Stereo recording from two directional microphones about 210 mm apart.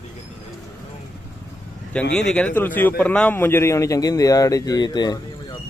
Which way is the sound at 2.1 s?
5° left (ahead or behind).